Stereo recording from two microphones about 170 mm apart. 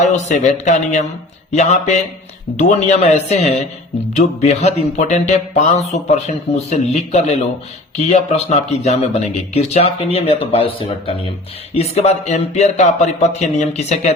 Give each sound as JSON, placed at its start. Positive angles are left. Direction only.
{"t": 0.0, "sound": "speech", "side_deg": 45}